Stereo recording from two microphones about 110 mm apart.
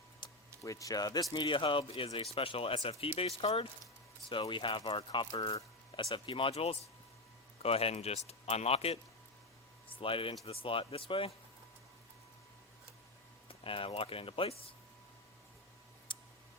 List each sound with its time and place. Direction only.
0.2 s a sound: 45° left (ahead or behind)
0.6 s speech: 30° left (ahead or behind); by 3.7 s 65° left (ahead or behind)
4.3 s speech: 50° left (ahead or behind); by 9.0 s 65° left (ahead or behind)
9.9 s speech: 55° left (ahead or behind)
13.5 s speech: 55° left (ahead or behind)
16.1 s clicking: 50° left (ahead or behind)